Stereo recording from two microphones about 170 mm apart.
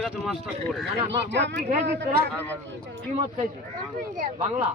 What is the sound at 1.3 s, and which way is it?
Speech, 90° right.